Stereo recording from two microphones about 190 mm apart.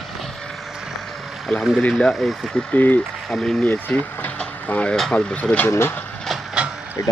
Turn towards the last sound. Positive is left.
turn(degrees=15)  # may be behind; listen again after turning